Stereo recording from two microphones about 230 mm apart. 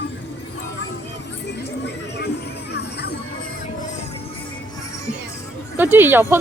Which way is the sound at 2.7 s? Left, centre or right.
Left.